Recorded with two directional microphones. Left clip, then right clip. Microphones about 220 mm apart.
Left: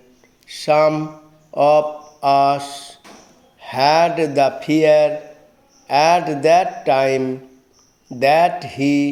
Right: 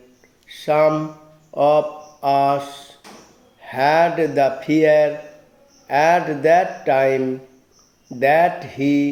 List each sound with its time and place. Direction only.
0.4 s a man's voice: 25° left (ahead or behind)
8.2 s speech: 25° left (ahead or behind)